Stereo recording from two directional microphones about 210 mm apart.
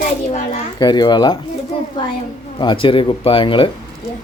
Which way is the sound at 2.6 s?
25° left (ahead or behind).